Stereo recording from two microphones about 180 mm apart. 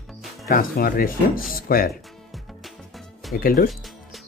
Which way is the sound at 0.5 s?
55° left (ahead or behind).